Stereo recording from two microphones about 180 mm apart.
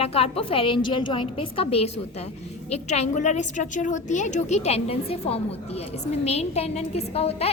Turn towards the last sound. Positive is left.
turn(degrees=35)  # may be behind; listen again after turning